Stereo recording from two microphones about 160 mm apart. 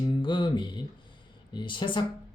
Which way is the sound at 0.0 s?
30° left (ahead or behind).